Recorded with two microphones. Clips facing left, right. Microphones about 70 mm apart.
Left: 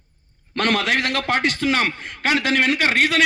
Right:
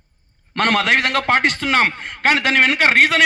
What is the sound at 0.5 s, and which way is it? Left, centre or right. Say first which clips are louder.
A man's voice: right 3 dB; right.